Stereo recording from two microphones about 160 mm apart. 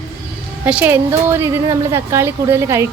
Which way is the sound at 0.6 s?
10° right (ahead or behind).